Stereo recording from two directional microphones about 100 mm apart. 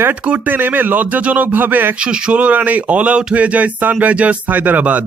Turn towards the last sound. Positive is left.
turn(degrees=-15)  # may be behind; listen again after turning